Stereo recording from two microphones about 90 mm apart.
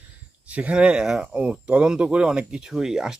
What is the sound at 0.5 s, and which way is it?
Speech, 15° right (ahead or behind).